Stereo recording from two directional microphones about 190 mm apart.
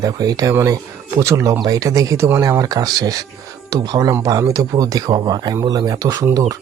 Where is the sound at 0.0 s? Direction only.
20° right (ahead or behind).